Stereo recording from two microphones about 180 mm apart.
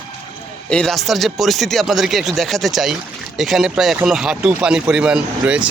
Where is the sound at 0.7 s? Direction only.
5° left (ahead or behind).